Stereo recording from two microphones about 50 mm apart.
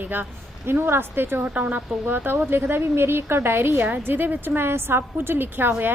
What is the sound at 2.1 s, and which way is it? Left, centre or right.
A woman's voice, right.